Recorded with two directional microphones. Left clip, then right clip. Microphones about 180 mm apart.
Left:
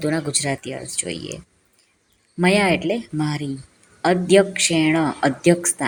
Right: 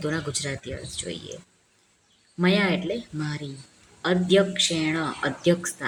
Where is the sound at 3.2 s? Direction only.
30° left (ahead or behind).